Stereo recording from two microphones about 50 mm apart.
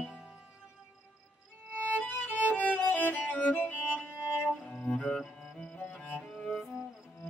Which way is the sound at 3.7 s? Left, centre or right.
Right.